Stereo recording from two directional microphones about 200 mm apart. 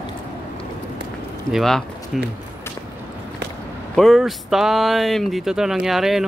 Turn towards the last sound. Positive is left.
turn(degrees=0)  # may be behind; listen again after turning